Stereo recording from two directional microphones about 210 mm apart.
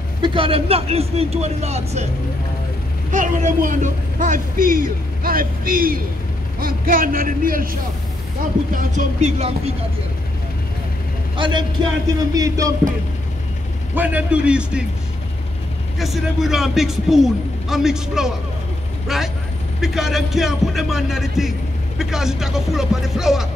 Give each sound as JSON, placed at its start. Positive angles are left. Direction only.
{"t": 0.2, "sound": "speech", "side_deg": -25}
{"t": 3.1, "sound": "speech", "side_deg": -35}
{"t": 11.3, "sound": "speech", "side_deg": -25}
{"t": 12.4, "sound": "music", "side_deg": -15}
{"t": 13.9, "sound": "speech", "side_deg": -5}
{"t": 16.0, "sound": "speech", "side_deg": 0}